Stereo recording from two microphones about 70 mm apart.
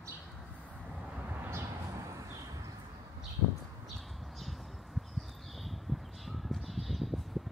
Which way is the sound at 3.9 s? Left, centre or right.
Centre.